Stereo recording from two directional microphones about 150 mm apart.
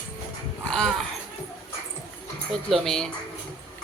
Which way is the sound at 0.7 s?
5° left (ahead or behind).